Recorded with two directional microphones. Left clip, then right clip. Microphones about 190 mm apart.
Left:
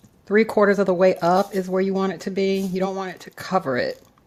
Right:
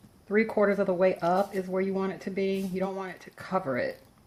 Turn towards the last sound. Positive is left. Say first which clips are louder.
# left 7 dB
turn(degrees=45)  # may be behind; listen again after turning